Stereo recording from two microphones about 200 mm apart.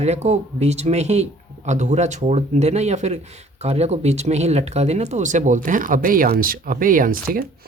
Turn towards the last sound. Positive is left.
turn(degrees=-45)  # may be behind; listen again after turning